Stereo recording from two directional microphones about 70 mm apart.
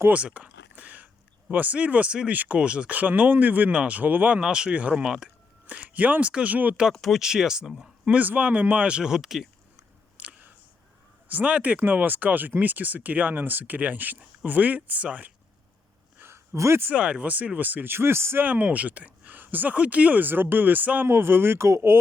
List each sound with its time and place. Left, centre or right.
0.1 s speech: centre
4.4 s speech: centre
6.9 s speech: centre
8.0 s speech: right; by 9.5 s centre
10.2 s camera: centre
11.3 s speech: right
16.1 s a sound: right
16.8 s speech: centre; by 18.4 s right
18.4 s speech: right
21.1 s speech: right